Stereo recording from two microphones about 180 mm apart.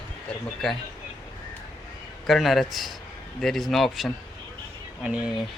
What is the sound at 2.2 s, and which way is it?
Speech, centre (ahead or behind).